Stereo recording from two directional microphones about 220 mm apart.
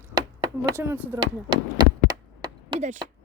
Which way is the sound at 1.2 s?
20° right (ahead or behind).